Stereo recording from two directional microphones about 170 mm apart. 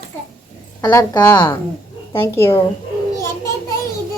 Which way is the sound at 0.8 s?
15° left (ahead or behind).